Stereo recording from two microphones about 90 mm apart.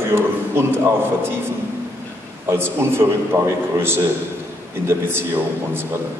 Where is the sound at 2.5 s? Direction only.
25° right (ahead or behind).